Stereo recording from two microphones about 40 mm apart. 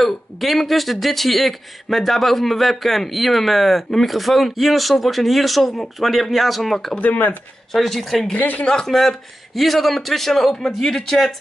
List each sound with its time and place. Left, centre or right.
0.0 s speech: centre
7.0 s speech: left
7.7 s speech: centre